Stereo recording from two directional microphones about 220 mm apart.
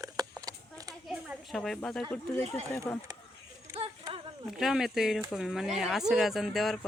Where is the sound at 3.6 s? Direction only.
20° right (ahead or behind).